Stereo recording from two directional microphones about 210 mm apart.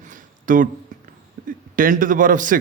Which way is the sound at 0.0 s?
40° right (ahead or behind).